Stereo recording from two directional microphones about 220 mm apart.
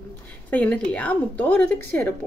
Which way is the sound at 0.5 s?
5° left (ahead or behind).